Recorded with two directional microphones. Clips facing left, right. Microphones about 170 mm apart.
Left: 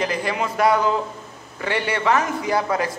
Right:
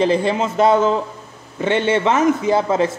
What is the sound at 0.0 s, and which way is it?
A man's voice, 25° right (ahead or behind).